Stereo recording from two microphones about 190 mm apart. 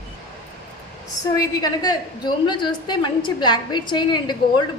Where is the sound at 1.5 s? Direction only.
20° left (ahead or behind).